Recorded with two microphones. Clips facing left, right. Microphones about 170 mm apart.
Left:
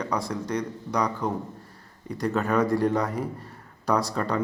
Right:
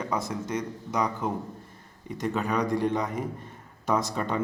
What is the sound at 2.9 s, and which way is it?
A man's voice, 20° right (ahead or behind).